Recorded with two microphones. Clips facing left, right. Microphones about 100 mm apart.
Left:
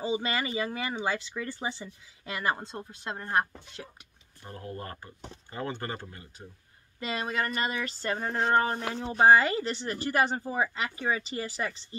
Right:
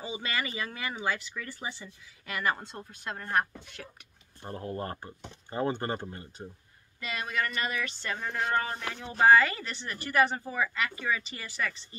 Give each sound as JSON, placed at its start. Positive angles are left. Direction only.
{"t": 0.0, "sound": "speech", "side_deg": 30}
{"t": 4.4, "sound": "speech", "side_deg": -30}
{"t": 7.0, "sound": "a sound", "side_deg": 30}